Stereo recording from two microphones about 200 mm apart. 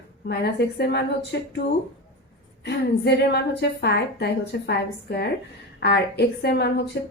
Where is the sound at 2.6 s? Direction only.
60° left (ahead or behind).